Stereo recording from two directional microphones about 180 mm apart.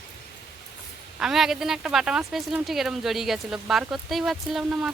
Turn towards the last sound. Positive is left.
turn(degrees=0)  # may be behind; listen again after turning